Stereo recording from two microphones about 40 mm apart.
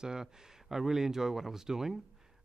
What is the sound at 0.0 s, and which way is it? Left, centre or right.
Speech, centre.